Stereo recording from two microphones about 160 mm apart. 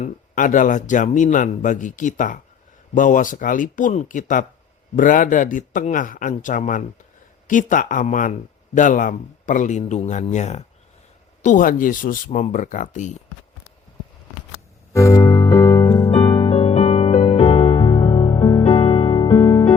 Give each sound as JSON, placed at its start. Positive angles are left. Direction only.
{"t": 0.0, "sound": "a man's voice", "side_deg": 55}
{"t": 11.4, "sound": "speech", "side_deg": 60}
{"t": 14.9, "sound": "music", "side_deg": 20}
{"t": 16.4, "sound": "music", "side_deg": 35}